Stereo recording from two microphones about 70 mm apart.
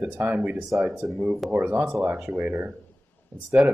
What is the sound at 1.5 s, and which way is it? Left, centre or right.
Speech, right.